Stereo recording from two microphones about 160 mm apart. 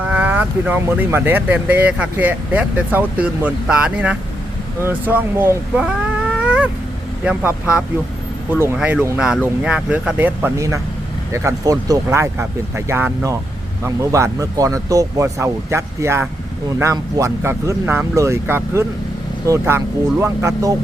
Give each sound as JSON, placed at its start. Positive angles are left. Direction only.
{"t": 0.0, "sound": "speech", "side_deg": -10}
{"t": 5.8, "sound": "cat", "side_deg": -5}
{"t": 7.3, "sound": "speech", "side_deg": -10}